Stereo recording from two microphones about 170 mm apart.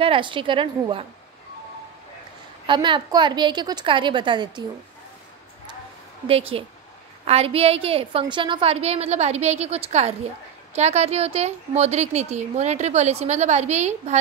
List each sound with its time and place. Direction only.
0.0 s a woman's voice: 30° right (ahead or behind)
2.6 s a woman's voice: 30° right (ahead or behind)
6.2 s a woman's voice: 35° right (ahead or behind)